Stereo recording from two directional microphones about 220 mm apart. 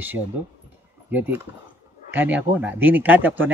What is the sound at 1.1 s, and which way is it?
Speech, 10° right (ahead or behind).